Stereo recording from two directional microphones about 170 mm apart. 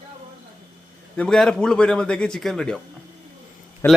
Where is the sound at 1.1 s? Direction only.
5° left (ahead or behind).